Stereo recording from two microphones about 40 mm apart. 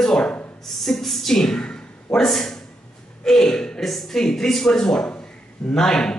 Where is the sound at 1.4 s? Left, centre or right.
Centre.